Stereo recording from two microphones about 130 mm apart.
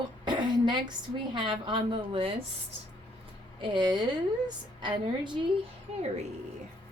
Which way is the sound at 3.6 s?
35° right (ahead or behind).